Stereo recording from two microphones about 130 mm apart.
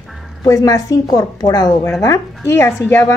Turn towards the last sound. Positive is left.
turn(degrees=20)  # may be behind; listen again after turning